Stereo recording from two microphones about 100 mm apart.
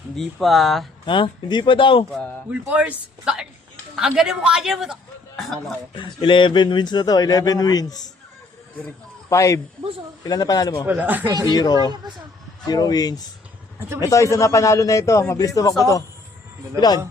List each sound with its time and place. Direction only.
0.2 s a man's voice: centre (ahead or behind)
1.0 s speech: 55° left (ahead or behind)
2.5 s a man's voice: 15° right (ahead or behind)
5.9 s speech: 55° left (ahead or behind)
9.3 s a man's voice: 30° left (ahead or behind)
10.8 s speech: 20° right (ahead or behind)
11.5 s a man's voice: 40° left (ahead or behind)